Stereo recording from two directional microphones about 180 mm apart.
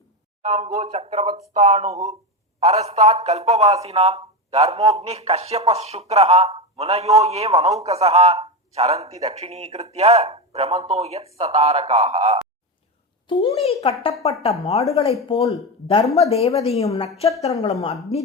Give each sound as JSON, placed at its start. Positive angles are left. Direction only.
{"t": 0.4, "sound": "a man's voice", "side_deg": -45}
{"t": 13.2, "sound": "a woman's voice", "side_deg": 30}